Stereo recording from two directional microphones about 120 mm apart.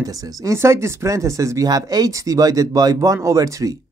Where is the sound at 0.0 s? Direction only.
30° right (ahead or behind).